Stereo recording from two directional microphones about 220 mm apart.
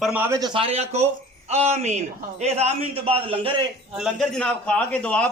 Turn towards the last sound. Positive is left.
turn(degrees=5)  # may be behind; listen again after turning